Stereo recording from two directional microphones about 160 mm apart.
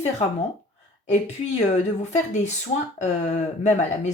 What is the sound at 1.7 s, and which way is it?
Speech, 45° left (ahead or behind).